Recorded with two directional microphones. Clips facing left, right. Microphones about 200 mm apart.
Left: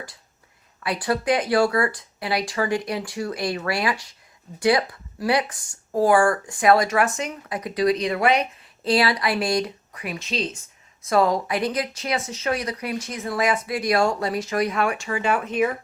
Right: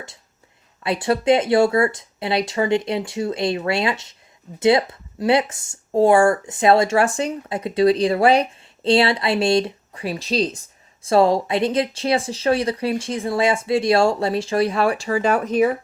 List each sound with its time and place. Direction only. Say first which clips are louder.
0.8 s speech: right 4 dB; 25° right (ahead or behind)